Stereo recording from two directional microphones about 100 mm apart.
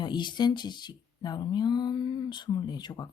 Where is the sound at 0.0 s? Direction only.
50° left (ahead or behind).